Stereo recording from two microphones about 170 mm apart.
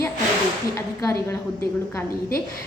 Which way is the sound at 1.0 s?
15° left (ahead or behind).